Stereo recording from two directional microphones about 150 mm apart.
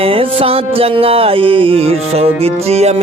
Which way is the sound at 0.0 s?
35° right (ahead or behind).